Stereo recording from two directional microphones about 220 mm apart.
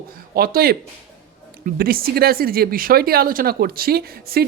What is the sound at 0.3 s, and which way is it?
Speech, 45° right (ahead or behind).